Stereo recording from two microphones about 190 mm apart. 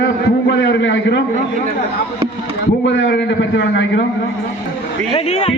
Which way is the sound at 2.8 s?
75° left (ahead or behind).